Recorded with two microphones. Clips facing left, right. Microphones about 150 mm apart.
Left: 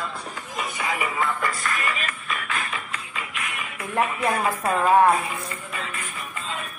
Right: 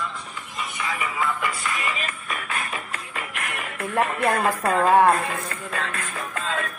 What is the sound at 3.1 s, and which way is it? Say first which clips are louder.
Music: right 2 dB; 60° right (ahead or behind).